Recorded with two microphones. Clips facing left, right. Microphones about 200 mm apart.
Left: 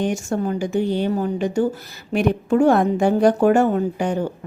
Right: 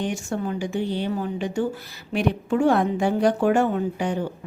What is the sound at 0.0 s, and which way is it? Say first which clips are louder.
A woman's voice: left 5 dB; 45° left (ahead or behind).